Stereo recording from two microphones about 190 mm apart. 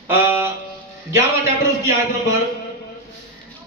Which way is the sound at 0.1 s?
10° right (ahead or behind).